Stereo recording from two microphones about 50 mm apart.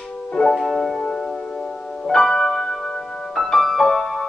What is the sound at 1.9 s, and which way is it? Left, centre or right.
Music, centre.